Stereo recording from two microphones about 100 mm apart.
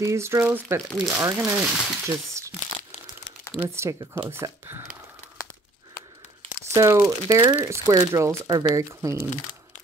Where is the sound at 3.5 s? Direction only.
25° right (ahead or behind).